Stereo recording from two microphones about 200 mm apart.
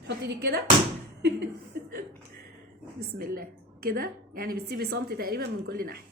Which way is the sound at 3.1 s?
45° right (ahead or behind).